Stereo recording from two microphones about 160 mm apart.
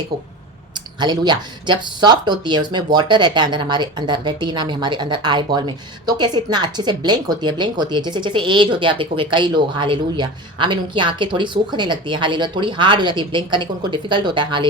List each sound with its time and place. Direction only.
0.9 s speech: 25° right (ahead or behind)